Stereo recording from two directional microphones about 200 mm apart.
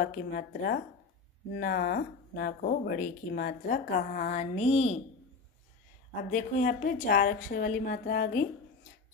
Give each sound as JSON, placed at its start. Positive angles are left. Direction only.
{"t": 0.0, "sound": "speech", "side_deg": 45}
{"t": 6.3, "sound": "speech", "side_deg": 40}